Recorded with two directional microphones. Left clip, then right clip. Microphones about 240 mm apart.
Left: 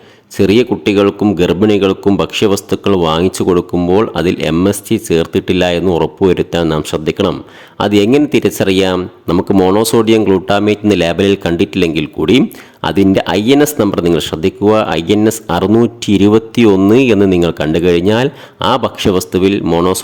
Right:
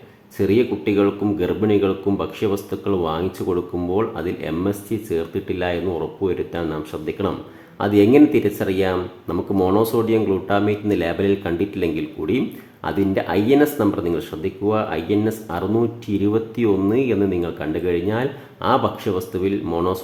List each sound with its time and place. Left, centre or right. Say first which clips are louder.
0.3 s speech: left 8 dB; left